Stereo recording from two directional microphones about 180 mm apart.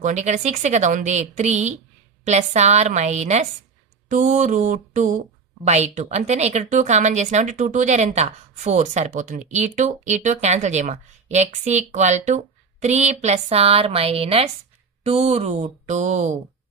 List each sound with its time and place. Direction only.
0.0 s a woman's voice: 40° right (ahead or behind)
4.1 s mantra: 45° right (ahead or behind)
5.7 s a woman's voice: 40° right (ahead or behind)